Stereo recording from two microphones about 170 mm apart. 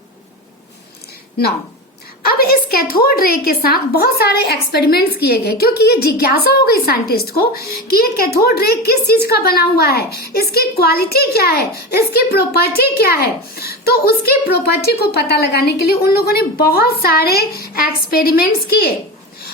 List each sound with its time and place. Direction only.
2.2 s a woman's voice: 60° left (ahead or behind)